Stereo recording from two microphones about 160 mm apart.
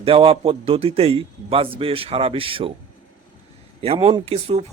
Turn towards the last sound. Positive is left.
turn(degrees=-40)  # may be behind; listen again after turning